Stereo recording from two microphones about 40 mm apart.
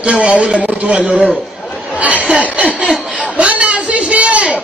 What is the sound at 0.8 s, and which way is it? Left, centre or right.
Speech, right.